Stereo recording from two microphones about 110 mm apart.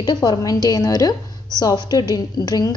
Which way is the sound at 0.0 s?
40° left (ahead or behind).